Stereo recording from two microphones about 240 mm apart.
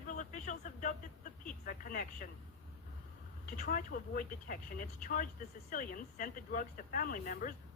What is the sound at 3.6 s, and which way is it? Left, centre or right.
Speech, left.